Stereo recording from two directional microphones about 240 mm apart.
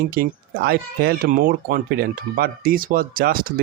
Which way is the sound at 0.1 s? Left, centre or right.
Right.